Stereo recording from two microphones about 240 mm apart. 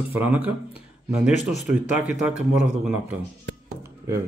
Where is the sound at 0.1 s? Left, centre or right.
Centre.